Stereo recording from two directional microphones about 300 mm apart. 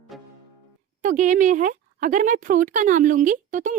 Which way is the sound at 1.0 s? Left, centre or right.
Right.